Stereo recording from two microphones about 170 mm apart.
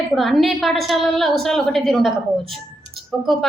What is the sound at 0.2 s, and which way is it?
A woman's voice, centre (ahead or behind).